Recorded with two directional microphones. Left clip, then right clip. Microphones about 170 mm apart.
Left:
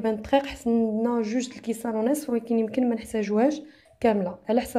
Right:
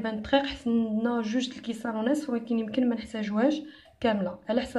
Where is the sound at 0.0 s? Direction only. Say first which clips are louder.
Left 3 dB; 30° left (ahead or behind).